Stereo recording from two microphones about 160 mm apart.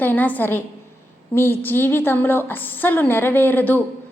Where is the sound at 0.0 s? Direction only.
10° left (ahead or behind).